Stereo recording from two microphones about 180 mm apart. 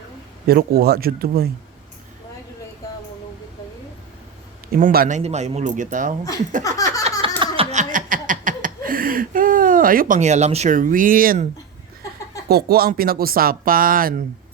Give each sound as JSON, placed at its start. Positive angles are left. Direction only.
{"t": 0.4, "sound": "speech", "side_deg": -60}
{"t": 4.8, "sound": "speech", "side_deg": -50}
{"t": 6.6, "sound": "a sound", "side_deg": 20}
{"t": 7.3, "sound": "chuckle", "side_deg": -30}
{"t": 12.5, "sound": "speech", "side_deg": -60}